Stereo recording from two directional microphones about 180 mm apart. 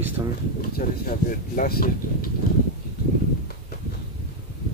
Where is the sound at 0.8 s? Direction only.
50° left (ahead or behind).